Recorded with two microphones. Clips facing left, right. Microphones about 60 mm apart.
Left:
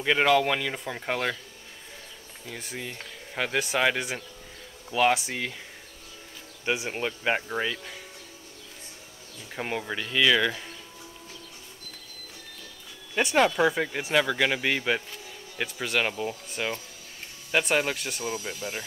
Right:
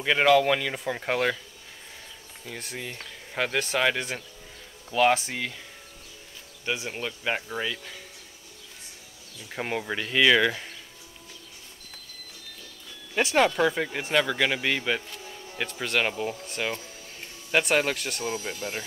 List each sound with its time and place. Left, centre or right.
0.0 s speech: centre
2.6 s speech: centre
6.6 s speech: centre
9.6 s speech: centre
13.1 s speech: centre
18.2 s speech: centre